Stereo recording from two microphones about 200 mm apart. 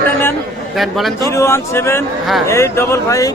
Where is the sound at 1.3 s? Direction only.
15° left (ahead or behind).